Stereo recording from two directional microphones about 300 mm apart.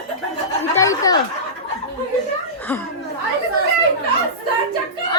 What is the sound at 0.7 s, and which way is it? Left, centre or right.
Snicker, centre.